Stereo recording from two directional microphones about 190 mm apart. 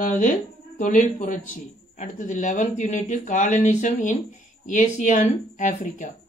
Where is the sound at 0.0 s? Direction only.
40° left (ahead or behind).